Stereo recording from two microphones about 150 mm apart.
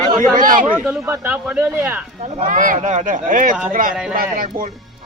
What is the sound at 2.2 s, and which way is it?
Speech, 50° right (ahead or behind).